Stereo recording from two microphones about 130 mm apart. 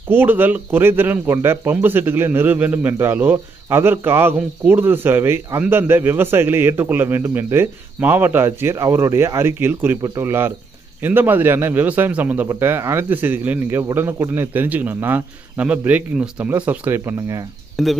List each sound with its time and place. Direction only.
0.1 s speech: 15° right (ahead or behind)
17.8 s speech: centre (ahead or behind)